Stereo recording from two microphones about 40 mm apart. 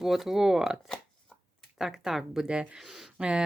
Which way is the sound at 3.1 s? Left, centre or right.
Right.